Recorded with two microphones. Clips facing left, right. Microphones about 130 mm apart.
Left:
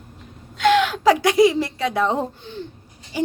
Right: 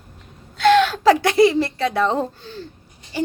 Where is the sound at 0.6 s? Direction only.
15° left (ahead or behind).